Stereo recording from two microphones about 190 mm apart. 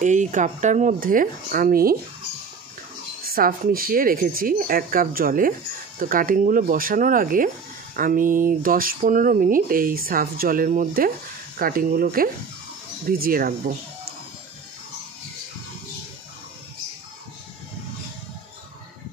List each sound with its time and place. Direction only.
0.0 s speech: 40° right (ahead or behind)
3.3 s speech: 50° right (ahead or behind)